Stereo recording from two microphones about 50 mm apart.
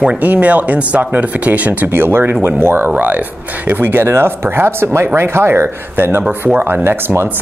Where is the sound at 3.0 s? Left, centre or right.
Right.